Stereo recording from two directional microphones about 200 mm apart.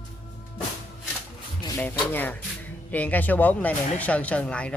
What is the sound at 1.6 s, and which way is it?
Speech, 15° left (ahead or behind).